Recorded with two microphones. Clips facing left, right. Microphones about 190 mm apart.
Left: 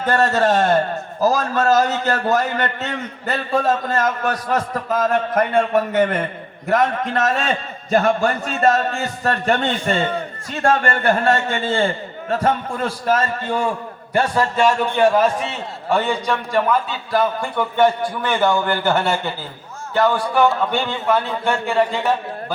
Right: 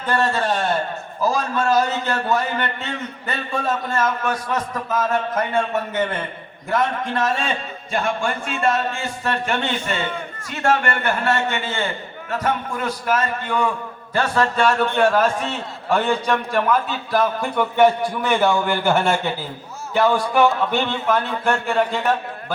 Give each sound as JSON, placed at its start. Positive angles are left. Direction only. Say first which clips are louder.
{"t": 0.0, "sound": "a man's voice", "louder": "left 4 dB", "side_deg": 45}
{"t": 5.3, "sound": "a man's voice", "louder": "left 4 dB", "side_deg": 55}
{"t": 6.7, "sound": "a man's voice", "louder": "left 3 dB", "side_deg": 40}
{"t": 14.5, "sound": "a man's voice", "louder": "left 1 dB", "side_deg": 10}